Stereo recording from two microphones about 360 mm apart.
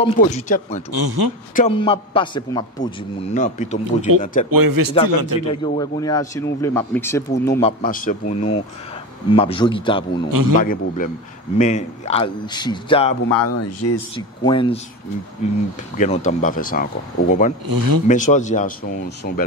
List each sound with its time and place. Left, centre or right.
0.0 s a man's voice: centre
0.9 s speech: right
1.5 s a man's voice: centre
4.5 s a man's voice: right
5.5 s a man's voice: centre
7.8 s a man's voice: left
10.3 s a man's voice: right
10.6 s a man's voice: left
13.3 s speech: left
14.1 s a man's voice: centre
16.0 s a man's voice: centre
17.6 s a man's voice: right
18.0 s a man's voice: left